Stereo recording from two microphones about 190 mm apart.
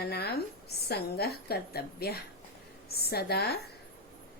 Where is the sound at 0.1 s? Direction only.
55° left (ahead or behind).